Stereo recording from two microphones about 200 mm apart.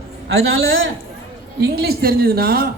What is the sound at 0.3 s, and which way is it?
Speech, 80° right.